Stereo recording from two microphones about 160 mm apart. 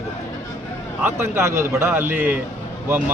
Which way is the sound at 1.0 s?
15° right (ahead or behind).